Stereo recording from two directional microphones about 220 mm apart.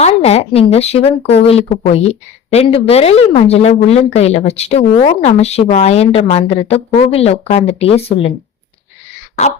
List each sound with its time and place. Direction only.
0.0 s speech: 30° left (ahead or behind)